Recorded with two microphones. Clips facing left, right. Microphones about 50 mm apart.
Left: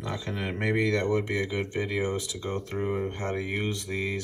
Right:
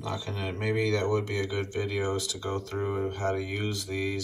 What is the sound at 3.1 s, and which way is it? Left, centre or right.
Speech, left.